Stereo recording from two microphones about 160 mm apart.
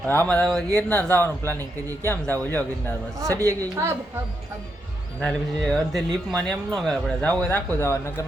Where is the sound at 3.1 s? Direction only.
20° right (ahead or behind).